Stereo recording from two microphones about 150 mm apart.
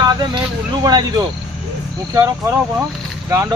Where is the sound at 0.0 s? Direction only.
25° right (ahead or behind).